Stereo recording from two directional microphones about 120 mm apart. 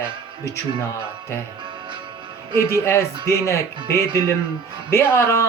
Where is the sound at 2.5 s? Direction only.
20° left (ahead or behind).